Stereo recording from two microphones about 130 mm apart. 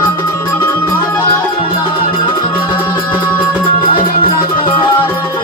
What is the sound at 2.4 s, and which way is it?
Music, 35° left (ahead or behind).